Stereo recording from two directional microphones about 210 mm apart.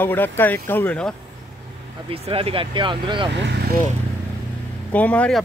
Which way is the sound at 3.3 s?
55° right (ahead or behind).